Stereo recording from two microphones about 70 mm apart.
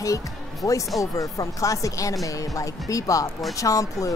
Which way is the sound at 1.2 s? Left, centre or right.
Left.